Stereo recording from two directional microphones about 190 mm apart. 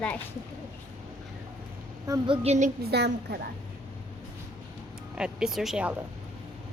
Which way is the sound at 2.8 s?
60° right (ahead or behind).